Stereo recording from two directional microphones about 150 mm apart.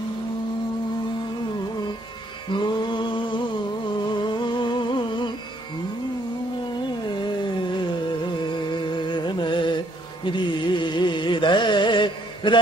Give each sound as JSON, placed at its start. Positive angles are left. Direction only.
{"t": 2.5, "sound": "music", "side_deg": 30}
{"t": 7.7, "sound": "music", "side_deg": 30}